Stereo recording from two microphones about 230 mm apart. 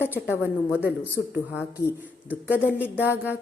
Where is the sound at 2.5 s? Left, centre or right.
Centre.